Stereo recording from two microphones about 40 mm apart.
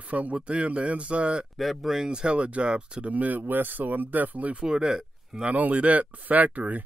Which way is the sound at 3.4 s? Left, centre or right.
Right.